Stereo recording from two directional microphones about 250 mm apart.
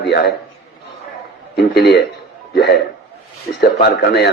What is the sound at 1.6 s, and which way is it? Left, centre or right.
Speech, left.